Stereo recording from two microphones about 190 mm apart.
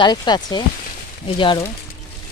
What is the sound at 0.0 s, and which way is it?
Speech, 25° left (ahead or behind).